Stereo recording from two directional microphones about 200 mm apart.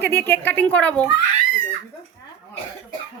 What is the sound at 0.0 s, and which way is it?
A woman's voice, 10° left (ahead or behind).